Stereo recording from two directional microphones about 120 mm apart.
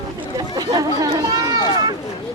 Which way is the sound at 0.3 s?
35° right (ahead or behind).